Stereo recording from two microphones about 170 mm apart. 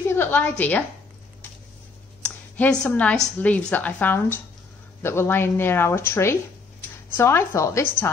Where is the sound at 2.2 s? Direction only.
5° left (ahead or behind).